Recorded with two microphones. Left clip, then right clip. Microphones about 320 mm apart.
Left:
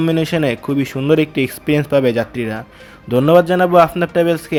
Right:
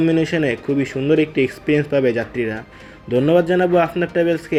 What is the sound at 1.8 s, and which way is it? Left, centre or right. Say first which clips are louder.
Speech: left 5 dB; left.